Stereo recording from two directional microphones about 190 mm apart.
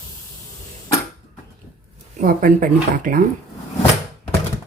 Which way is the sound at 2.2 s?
45° right (ahead or behind).